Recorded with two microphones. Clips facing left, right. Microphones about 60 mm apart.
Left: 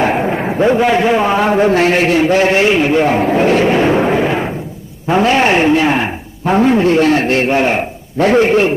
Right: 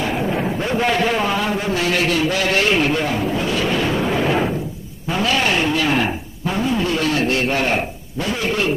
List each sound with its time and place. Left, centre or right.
0.0 s a sound: left
0.7 s a man's voice: centre
3.2 s a man's voice: left
3.6 s vehicle: left
4.2 s a sound: centre
5.0 s a man's voice: left
6.4 s a man's voice: left
6.8 s a man's voice: left
8.4 s a man's voice: left